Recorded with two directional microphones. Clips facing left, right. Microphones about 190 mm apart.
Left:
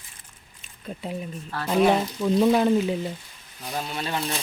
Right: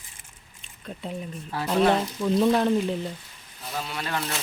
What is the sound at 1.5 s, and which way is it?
Speech, 10° right (ahead or behind).